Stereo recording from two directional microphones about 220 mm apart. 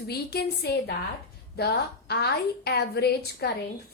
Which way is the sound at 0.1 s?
45° left (ahead or behind).